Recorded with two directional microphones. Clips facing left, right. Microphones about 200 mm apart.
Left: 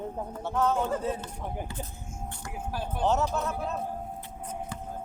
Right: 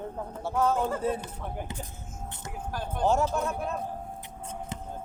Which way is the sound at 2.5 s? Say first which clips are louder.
Left 1 dB; 10° left (ahead or behind).